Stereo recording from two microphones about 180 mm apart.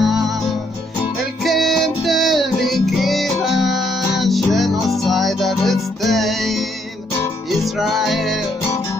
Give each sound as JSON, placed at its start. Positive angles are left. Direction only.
{"t": 0.0, "sound": "music", "side_deg": 0}
{"t": 1.4, "sound": "music", "side_deg": 0}
{"t": 7.8, "sound": "music", "side_deg": 0}